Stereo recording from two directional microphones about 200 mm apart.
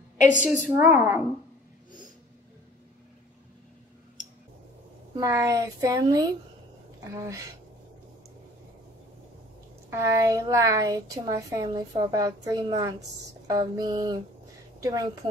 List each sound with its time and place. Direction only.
0.4 s a woman's voice: 5° right (ahead or behind)
5.1 s a woman's voice: 15° right (ahead or behind)
9.8 s a woman's voice: 15° right (ahead or behind)
13.5 s a sound: 20° right (ahead or behind)
14.8 s speech: 20° right (ahead or behind)